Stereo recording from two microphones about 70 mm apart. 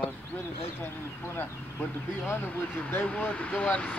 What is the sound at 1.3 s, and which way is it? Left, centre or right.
Speech, left.